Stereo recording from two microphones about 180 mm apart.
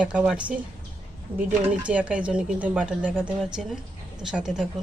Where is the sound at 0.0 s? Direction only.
5° right (ahead or behind).